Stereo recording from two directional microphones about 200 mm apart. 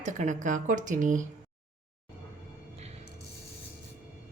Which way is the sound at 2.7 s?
30° right (ahead or behind).